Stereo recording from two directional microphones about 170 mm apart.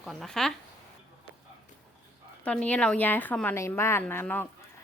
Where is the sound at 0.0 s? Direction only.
Centre (ahead or behind).